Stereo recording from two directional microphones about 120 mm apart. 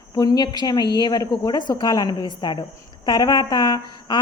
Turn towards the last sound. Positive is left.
turn(degrees=35)  # may be behind; listen again after turning